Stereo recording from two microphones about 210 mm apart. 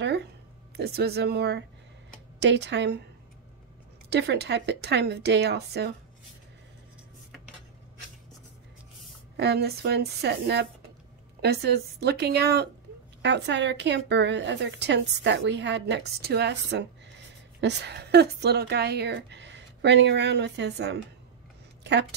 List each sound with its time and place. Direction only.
0.0 s a sound: 50° right (ahead or behind)
0.7 s a woman's voice: 50° right (ahead or behind)
4.1 s a woman's voice: 50° right (ahead or behind)
9.4 s a woman's voice: 50° right (ahead or behind)